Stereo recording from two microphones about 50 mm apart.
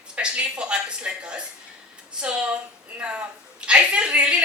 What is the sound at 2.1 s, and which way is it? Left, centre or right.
Speech, centre.